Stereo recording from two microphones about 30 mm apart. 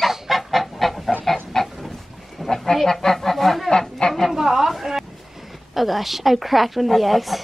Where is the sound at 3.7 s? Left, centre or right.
Left.